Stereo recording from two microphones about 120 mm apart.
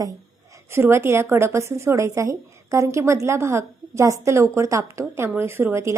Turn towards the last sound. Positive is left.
turn(degrees=-25)  # may be behind; listen again after turning